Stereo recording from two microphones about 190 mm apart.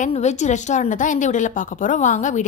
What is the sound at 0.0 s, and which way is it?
Speech, 35° left (ahead or behind).